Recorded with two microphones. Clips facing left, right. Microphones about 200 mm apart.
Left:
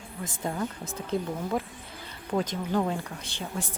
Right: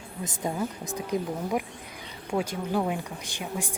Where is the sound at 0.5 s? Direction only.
10° right (ahead or behind).